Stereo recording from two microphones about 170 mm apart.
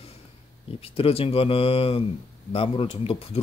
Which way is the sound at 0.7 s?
35° left (ahead or behind).